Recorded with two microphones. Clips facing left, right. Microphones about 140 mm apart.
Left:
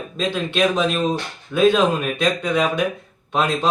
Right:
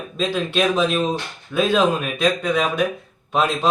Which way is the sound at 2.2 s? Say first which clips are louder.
Right 1 dB; centre (ahead or behind).